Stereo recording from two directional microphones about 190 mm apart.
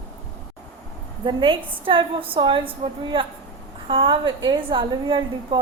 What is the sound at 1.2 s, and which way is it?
A woman's voice, 25° right (ahead or behind).